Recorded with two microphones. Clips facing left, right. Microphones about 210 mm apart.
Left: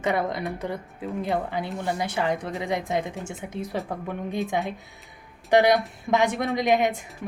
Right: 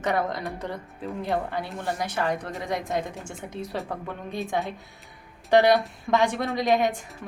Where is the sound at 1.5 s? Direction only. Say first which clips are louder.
Left 2 dB; 15° left (ahead or behind).